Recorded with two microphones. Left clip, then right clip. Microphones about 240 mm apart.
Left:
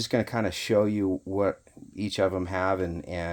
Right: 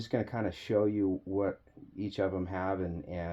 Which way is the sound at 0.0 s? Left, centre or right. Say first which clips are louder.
Left 7 dB; left.